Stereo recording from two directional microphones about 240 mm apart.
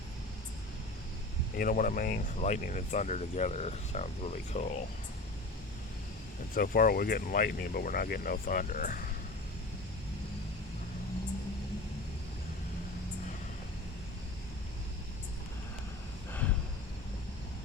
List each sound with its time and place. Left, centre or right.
1.5 s speech: left
6.5 s speech: left